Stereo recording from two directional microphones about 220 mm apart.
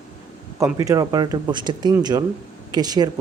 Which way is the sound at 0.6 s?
15° right (ahead or behind).